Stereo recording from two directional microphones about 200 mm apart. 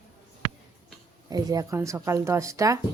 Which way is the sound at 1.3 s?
20° right (ahead or behind).